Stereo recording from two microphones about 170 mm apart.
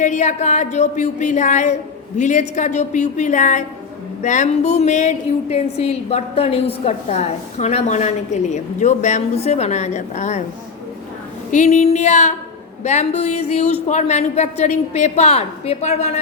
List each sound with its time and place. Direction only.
0.0 s a woman's voice: 45° left (ahead or behind)
11.5 s a woman's voice: 40° left (ahead or behind)